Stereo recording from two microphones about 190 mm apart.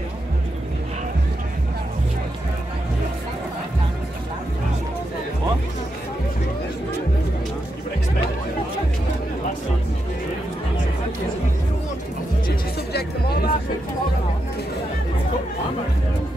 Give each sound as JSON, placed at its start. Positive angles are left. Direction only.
{"t": 12.4, "sound": "music", "side_deg": 55}